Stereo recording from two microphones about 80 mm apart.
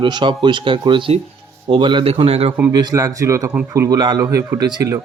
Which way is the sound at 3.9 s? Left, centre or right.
Right.